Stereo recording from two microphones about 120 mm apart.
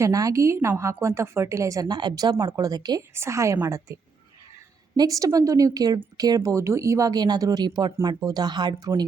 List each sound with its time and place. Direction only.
0.0 s a woman's voice: 30° right (ahead or behind)